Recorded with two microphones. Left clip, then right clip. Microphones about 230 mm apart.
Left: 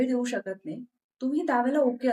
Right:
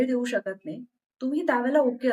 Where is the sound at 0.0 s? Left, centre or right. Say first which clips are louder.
Right 2 dB; centre.